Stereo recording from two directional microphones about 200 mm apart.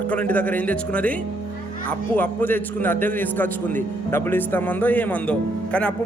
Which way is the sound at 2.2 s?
10° left (ahead or behind).